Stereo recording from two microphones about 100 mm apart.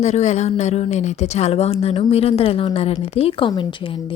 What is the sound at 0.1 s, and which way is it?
Speech, 90° left.